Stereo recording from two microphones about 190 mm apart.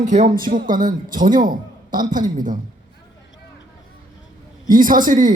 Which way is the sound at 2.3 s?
45° right (ahead or behind).